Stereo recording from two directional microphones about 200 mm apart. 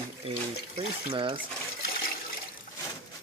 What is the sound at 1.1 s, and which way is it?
Speech, 25° right (ahead or behind).